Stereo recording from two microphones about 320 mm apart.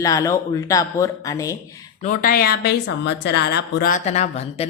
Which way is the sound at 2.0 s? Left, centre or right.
Left.